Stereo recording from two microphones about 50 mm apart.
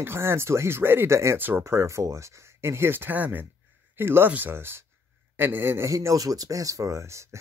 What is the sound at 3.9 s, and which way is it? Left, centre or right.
Speech, right.